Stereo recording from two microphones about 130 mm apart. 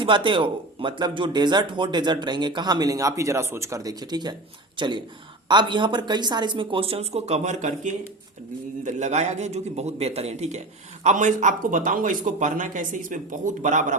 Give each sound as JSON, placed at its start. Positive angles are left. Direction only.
{"t": 0.0, "sound": "a man's voice", "side_deg": -40}
{"t": 11.0, "sound": "speech", "side_deg": -70}